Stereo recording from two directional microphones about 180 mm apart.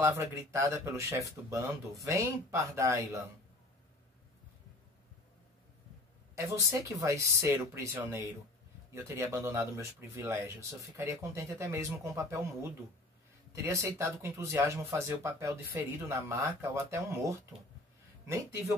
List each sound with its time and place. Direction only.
0.0 s speech: 15° right (ahead or behind)
6.3 s speech: 15° right (ahead or behind)
13.5 s speech: 15° right (ahead or behind)